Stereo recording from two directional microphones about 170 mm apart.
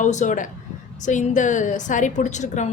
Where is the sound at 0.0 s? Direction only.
45° left (ahead or behind).